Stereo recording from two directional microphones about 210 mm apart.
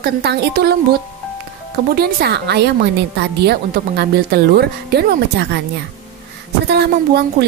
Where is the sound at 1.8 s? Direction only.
45° right (ahead or behind).